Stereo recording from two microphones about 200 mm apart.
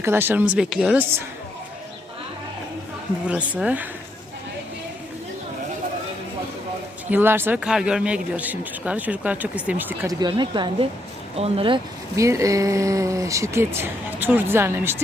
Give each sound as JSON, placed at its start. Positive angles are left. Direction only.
{"t": 0.0, "sound": "speech", "side_deg": -10}
{"t": 3.2, "sound": "speech", "side_deg": -5}
{"t": 7.1, "sound": "speech", "side_deg": -10}
{"t": 12.1, "sound": "speech", "side_deg": -15}